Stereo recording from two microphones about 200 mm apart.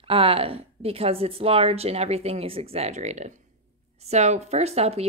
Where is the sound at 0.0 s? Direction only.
30° right (ahead or behind).